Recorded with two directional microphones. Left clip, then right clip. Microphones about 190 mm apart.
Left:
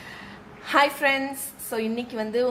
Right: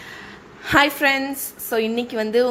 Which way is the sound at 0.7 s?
20° right (ahead or behind).